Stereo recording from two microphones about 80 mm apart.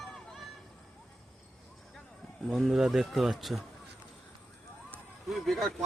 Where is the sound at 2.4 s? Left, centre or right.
Centre.